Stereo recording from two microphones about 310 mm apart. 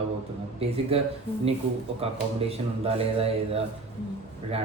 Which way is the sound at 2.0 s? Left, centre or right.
Centre.